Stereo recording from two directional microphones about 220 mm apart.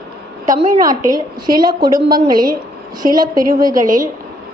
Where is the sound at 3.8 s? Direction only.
35° right (ahead or behind).